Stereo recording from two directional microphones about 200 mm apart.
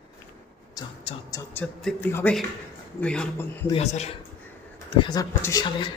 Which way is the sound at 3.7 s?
30° left (ahead or behind).